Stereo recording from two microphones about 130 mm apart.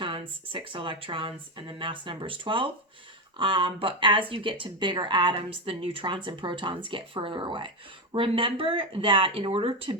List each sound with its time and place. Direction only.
0.0 s speech: 40° right (ahead or behind)